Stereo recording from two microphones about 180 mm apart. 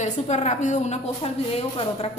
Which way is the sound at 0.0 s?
40° left (ahead or behind).